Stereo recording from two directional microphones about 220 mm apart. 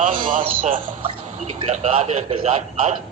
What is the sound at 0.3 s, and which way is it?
Speech, 35° right (ahead or behind).